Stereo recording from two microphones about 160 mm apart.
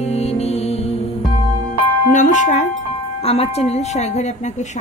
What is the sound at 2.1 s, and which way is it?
Chime, 50° left (ahead or behind).